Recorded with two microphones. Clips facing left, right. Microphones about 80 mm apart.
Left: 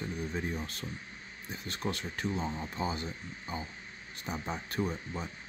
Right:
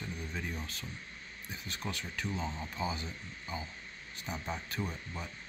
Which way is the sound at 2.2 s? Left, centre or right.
Centre.